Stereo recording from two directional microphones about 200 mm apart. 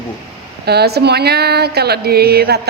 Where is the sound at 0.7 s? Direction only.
55° right (ahead or behind).